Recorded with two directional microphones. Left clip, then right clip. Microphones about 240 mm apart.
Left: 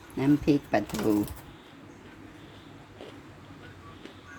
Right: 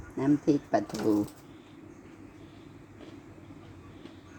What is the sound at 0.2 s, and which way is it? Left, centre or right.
Speech, left.